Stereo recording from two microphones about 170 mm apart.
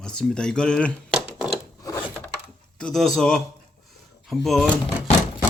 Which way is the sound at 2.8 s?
5° left (ahead or behind).